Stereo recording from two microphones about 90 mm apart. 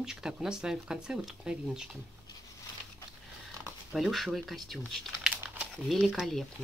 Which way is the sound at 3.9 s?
Centre (ahead or behind).